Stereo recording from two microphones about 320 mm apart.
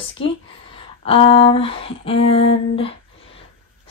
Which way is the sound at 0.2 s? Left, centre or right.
Centre.